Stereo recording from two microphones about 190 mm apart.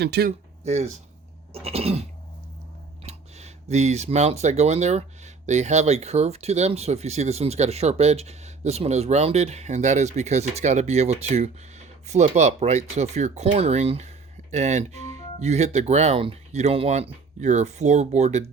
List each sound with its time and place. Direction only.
0.0 s speech: 60° right (ahead or behind)
0.3 s a sound: 35° right (ahead or behind)
1.5 s speech: 30° right (ahead or behind)